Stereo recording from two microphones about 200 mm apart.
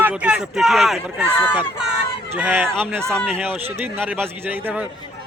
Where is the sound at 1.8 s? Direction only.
5° right (ahead or behind).